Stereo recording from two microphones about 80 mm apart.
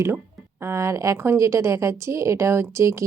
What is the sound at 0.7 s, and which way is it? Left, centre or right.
A woman's voice, right.